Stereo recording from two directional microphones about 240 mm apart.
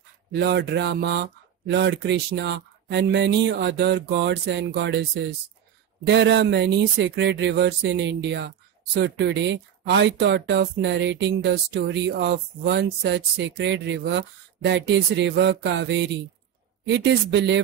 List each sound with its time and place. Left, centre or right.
0.3 s speech: right